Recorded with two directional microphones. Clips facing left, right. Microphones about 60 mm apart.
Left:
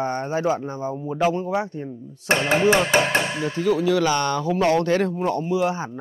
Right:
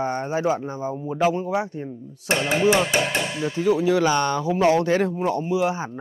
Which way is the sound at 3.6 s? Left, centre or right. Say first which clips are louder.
Right 1 dB; right.